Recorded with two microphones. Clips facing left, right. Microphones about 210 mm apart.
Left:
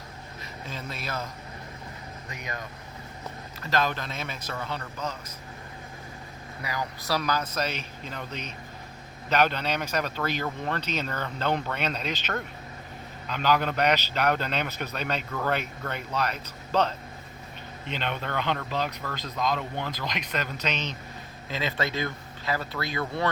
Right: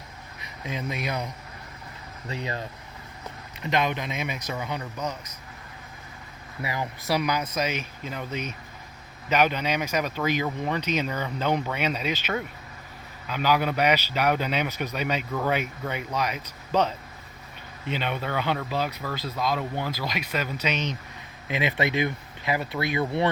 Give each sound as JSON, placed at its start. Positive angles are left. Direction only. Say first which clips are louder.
{"t": 0.6, "sound": "a man's voice", "louder": "right 6 dB", "side_deg": -15}
{"t": 2.3, "sound": "a man's voice", "louder": "right 6 dB", "side_deg": -30}
{"t": 6.6, "sound": "a man's voice", "louder": "right 2 dB", "side_deg": -25}